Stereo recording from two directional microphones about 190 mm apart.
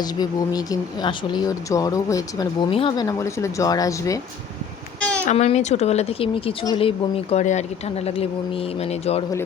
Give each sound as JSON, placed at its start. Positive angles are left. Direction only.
{"t": 0.0, "sound": "speech", "side_deg": 20}
{"t": 5.2, "sound": "speech", "side_deg": 35}